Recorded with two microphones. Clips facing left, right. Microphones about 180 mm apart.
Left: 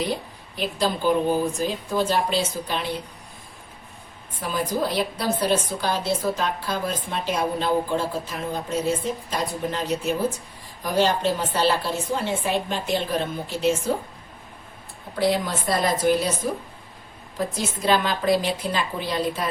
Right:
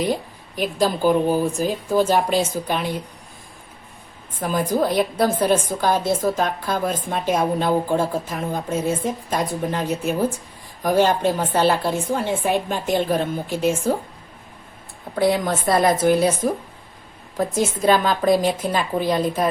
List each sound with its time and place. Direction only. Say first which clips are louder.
0.5 s a woman's voice: right 4 dB; 45° right (ahead or behind)
4.4 s a woman's voice: right 5 dB; 50° right (ahead or behind)
15.2 s a woman's voice: right 3 dB; 55° right (ahead or behind)
17.5 s a woman's voice: right 5 dB; 50° right (ahead or behind)